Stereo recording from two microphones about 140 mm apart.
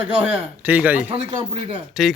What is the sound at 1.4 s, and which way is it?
Speech, 40° right (ahead or behind).